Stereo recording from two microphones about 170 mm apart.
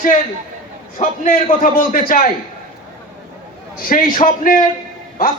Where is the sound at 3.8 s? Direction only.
55° left (ahead or behind).